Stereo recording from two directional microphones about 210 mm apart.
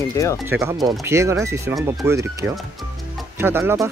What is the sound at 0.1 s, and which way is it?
Speech, 15° left (ahead or behind).